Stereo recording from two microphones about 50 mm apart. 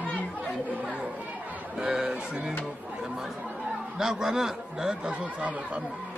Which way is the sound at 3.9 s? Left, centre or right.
Centre.